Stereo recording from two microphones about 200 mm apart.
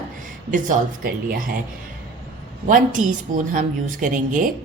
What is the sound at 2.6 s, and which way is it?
A woman's voice, 40° right (ahead or behind).